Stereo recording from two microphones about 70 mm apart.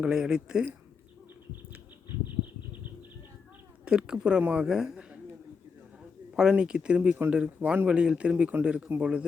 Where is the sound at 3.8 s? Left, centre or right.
Centre.